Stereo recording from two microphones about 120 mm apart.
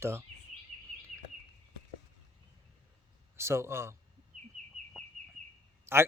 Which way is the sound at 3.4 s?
20° right (ahead or behind).